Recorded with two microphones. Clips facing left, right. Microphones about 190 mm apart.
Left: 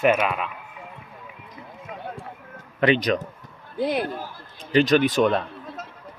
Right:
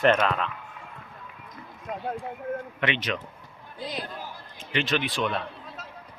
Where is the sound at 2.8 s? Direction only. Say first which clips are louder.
Left 12 dB; 40° left (ahead or behind).